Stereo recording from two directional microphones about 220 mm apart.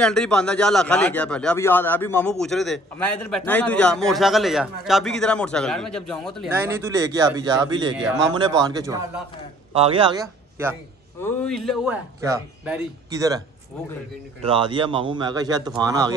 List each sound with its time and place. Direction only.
0.0 s a man's voice: 5° left (ahead or behind)
6.6 s speech: 10° right (ahead or behind)
11.1 s speech: 10° left (ahead or behind)
11.5 s speech: centre (ahead or behind)
14.4 s speech: 25° right (ahead or behind)